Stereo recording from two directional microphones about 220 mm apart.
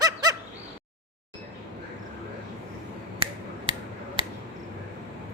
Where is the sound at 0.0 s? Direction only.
15° right (ahead or behind).